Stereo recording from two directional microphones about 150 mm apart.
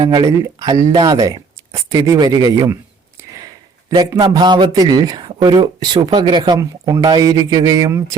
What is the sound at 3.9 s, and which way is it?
Speech, 30° right (ahead or behind).